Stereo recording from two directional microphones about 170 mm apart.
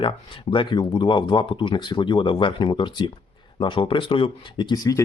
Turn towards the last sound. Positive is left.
turn(degrees=20)  # may be behind; listen again after turning